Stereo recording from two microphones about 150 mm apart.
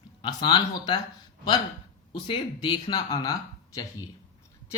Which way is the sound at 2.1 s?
30° left (ahead or behind).